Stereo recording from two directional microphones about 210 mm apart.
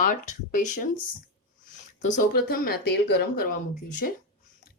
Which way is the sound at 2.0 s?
35° left (ahead or behind).